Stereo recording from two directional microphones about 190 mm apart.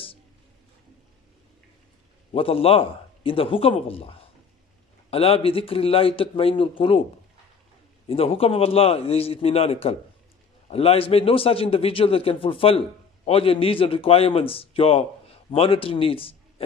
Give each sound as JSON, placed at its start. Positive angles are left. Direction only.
{"t": 2.3, "sound": "a man's voice", "side_deg": 30}
{"t": 8.1, "sound": "a man's voice", "side_deg": 30}